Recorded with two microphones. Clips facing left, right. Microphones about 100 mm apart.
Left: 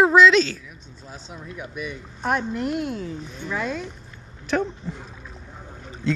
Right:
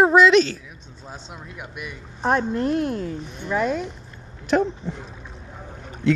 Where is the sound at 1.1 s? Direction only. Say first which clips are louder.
Even; 20° right (ahead or behind).